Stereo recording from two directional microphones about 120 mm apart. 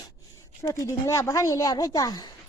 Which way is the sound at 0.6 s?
25° left (ahead or behind).